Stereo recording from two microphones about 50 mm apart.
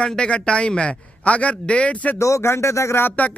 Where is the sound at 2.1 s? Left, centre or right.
Left.